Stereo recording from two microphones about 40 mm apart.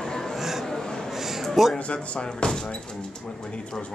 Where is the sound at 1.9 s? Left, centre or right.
Left.